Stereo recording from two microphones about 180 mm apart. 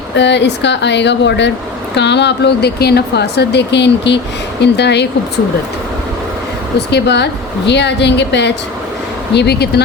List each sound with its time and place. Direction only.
0.2 s speech: 75° left (ahead or behind)
6.7 s speech: 70° left (ahead or behind)